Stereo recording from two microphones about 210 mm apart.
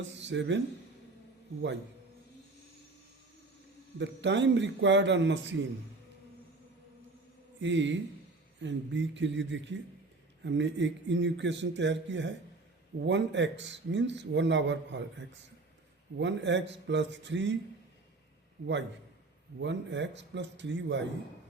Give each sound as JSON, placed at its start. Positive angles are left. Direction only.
{"t": 0.1, "sound": "speech", "side_deg": -60}
{"t": 3.9, "sound": "a man's voice", "side_deg": -55}
{"t": 7.6, "sound": "a man's voice", "side_deg": -60}
{"t": 16.1, "sound": "a man's voice", "side_deg": -55}
{"t": 18.6, "sound": "a man's voice", "side_deg": -55}